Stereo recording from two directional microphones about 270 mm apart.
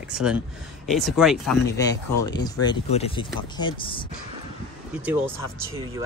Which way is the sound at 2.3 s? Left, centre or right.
Centre.